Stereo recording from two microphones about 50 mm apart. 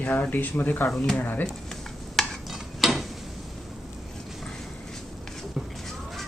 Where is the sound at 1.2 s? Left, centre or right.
Left.